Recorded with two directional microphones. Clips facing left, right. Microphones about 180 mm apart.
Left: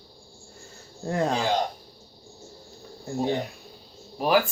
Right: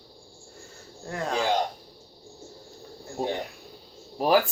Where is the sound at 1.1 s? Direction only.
30° left (ahead or behind).